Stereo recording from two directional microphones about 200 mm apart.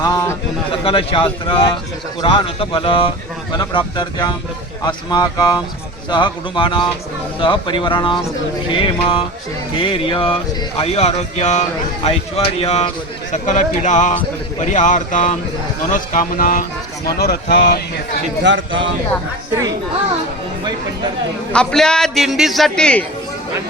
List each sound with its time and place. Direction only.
0.0 s a sound: 15° left (ahead or behind)
0.9 s speech: 25° left (ahead or behind)
12.6 s speech: 35° left (ahead or behind); by 18.0 s 50° left (ahead or behind)
18.4 s speech: 70° right (ahead or behind)
21.5 s a man's voice: 5° left (ahead or behind)